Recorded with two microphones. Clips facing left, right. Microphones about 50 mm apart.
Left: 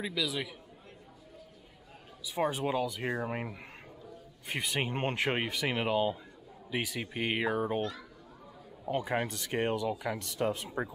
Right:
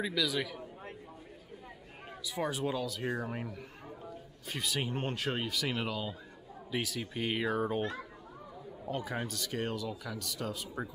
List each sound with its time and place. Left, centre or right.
0.0 s a man's voice: centre
2.3 s speech: left
8.9 s speech: left